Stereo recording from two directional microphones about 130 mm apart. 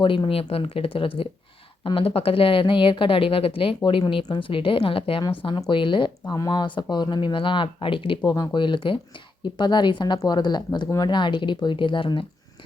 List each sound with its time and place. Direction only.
0.0 s a woman's voice: 40° left (ahead or behind)